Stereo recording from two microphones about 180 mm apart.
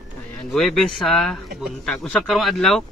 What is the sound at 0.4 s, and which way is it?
A man's voice, centre (ahead or behind).